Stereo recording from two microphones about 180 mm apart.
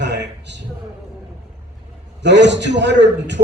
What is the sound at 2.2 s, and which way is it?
A man's voice, 75° right (ahead or behind).